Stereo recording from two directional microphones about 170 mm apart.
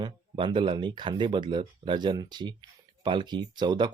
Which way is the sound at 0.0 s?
30° right (ahead or behind).